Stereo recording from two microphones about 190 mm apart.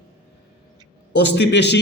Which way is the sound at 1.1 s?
60° left (ahead or behind).